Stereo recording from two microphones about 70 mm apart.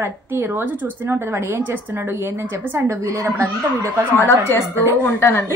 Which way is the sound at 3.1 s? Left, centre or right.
Right.